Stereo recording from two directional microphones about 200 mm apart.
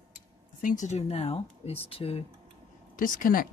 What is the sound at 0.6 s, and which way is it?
Speech, 40° left (ahead or behind).